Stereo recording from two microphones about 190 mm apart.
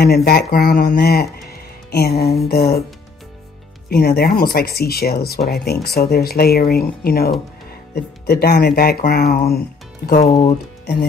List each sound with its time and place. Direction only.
0.0 s speech: 55° left (ahead or behind)
1.5 s music: 55° left (ahead or behind)
2.4 s speech: 55° left (ahead or behind)
3.9 s speech: 55° left (ahead or behind)
10.2 s speech: 35° left (ahead or behind)